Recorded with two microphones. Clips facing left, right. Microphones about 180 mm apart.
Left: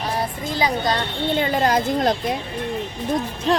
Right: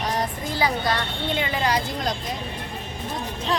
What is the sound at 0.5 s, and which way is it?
Speech, 15° left (ahead or behind).